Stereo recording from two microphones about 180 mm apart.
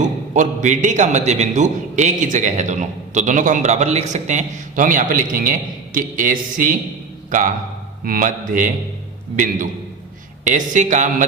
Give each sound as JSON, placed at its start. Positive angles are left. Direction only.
{"t": 0.3, "sound": "a man's voice", "side_deg": -45}